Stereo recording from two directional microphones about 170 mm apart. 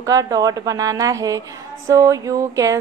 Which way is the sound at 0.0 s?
20° right (ahead or behind).